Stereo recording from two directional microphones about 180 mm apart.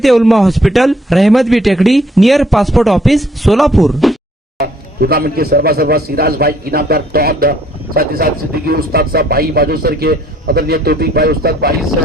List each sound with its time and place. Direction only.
0.0 s a man's voice: centre (ahead or behind)
4.5 s a man's voice: 60° right (ahead or behind)